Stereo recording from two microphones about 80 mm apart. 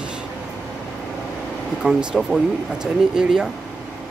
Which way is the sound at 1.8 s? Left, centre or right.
Centre.